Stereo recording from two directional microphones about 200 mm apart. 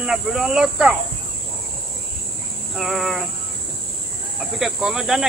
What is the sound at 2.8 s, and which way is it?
Speech, centre (ahead or behind).